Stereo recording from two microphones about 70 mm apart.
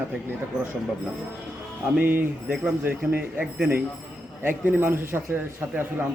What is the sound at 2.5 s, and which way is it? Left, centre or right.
A man's voice, right.